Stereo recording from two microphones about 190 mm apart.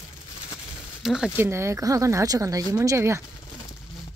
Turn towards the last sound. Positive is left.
turn(degrees=-15)  # may be behind; listen again after turning